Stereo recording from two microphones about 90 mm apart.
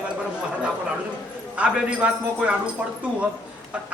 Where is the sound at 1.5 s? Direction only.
15° right (ahead or behind).